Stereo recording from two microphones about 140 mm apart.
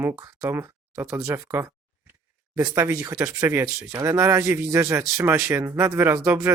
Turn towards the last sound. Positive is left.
turn(degrees=-15)  # may be behind; listen again after turning